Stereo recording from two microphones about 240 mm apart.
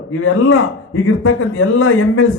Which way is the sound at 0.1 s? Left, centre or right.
Left.